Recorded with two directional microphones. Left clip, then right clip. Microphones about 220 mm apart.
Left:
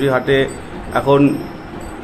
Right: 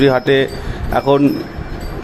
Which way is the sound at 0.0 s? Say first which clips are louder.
Right 2 dB; 30° right (ahead or behind).